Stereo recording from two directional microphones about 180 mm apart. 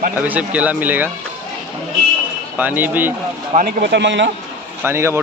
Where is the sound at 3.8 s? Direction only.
75° right (ahead or behind).